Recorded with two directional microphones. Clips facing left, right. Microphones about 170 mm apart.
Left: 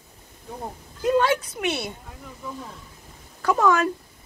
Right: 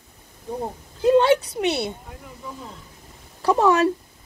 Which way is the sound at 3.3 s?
30° right (ahead or behind).